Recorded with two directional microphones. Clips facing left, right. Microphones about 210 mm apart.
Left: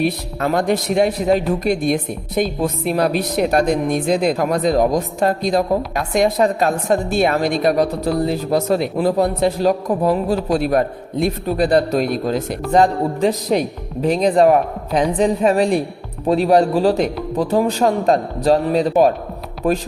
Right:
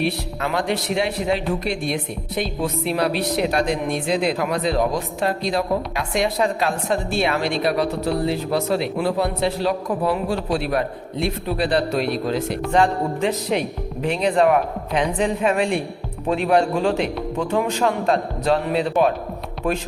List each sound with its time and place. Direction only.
0.0 s speech: 45° left (ahead or behind)